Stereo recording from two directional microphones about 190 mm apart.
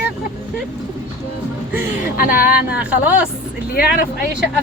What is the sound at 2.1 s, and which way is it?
Speech, 50° left (ahead or behind).